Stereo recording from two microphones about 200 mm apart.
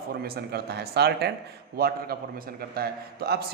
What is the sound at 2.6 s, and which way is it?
Speech, 50° right (ahead or behind).